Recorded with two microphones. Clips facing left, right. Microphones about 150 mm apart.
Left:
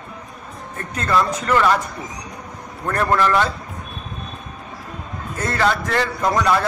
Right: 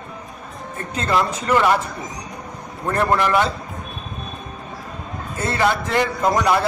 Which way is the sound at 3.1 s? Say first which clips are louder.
Left 3 dB; 15° right (ahead or behind).